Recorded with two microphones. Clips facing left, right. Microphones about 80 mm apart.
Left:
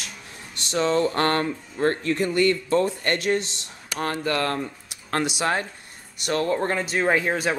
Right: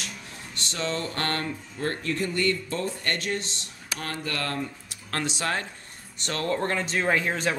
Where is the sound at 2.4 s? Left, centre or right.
Left.